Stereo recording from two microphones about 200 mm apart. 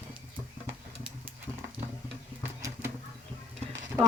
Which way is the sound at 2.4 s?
15° right (ahead or behind).